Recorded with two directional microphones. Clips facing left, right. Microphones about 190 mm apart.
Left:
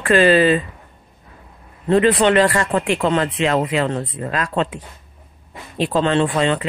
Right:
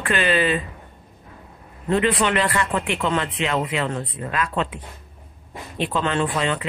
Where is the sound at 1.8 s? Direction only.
40° left (ahead or behind).